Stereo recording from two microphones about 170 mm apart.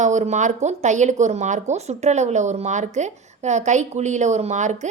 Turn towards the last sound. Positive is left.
turn(degrees=-45)  # may be behind; listen again after turning